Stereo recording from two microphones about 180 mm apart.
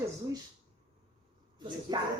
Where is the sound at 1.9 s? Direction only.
20° right (ahead or behind).